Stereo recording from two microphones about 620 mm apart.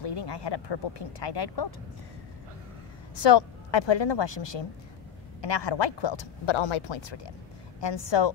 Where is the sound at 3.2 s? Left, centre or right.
Left.